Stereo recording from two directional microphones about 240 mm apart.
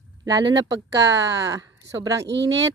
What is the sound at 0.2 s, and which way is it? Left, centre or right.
Speech, centre.